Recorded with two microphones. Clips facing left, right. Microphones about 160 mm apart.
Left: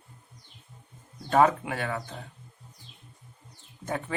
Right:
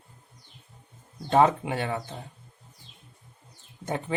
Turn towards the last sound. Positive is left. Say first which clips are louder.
# right 2 dB
turn(degrees=-20)  # may be behind; listen again after turning